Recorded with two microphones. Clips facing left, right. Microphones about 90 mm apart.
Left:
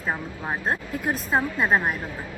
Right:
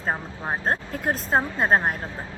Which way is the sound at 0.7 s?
45° right (ahead or behind).